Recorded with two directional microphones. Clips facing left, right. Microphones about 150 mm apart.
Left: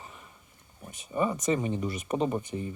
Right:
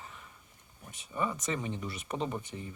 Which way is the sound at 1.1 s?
25° left (ahead or behind).